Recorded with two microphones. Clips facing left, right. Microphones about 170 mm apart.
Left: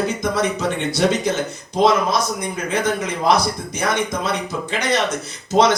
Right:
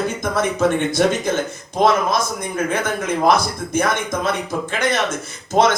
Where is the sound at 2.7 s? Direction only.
50° right (ahead or behind).